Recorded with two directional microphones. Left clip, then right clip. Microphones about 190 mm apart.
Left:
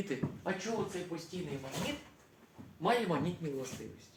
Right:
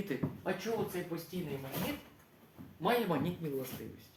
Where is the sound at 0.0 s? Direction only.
5° right (ahead or behind).